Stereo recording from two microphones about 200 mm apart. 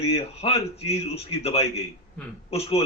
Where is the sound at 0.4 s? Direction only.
30° left (ahead or behind).